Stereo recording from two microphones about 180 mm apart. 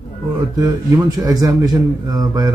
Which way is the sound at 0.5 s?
25° right (ahead or behind).